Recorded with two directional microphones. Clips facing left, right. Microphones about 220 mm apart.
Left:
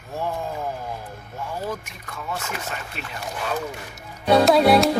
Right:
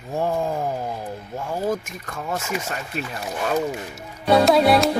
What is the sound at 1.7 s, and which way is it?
Speech, 45° right (ahead or behind).